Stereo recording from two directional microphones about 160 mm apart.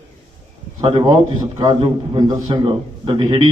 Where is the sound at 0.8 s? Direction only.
30° right (ahead or behind).